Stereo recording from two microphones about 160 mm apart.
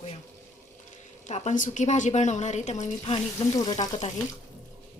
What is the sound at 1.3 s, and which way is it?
A woman's voice, 50° left (ahead or behind).